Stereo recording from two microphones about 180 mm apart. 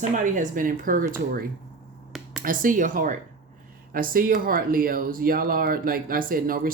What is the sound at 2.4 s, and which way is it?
Speech, 50° right (ahead or behind).